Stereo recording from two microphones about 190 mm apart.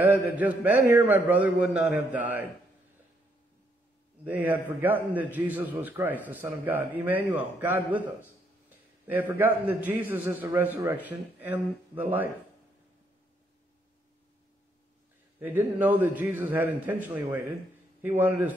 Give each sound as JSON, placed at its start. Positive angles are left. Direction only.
{"t": 0.0, "sound": "a man's voice", "side_deg": -10}
{"t": 4.2, "sound": "a man's voice", "side_deg": -10}
{"t": 15.3, "sound": "a man's voice", "side_deg": -10}